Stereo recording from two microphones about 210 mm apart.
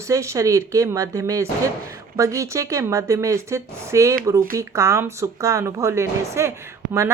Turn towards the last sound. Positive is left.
turn(degrees=-15)  # may be behind; listen again after turning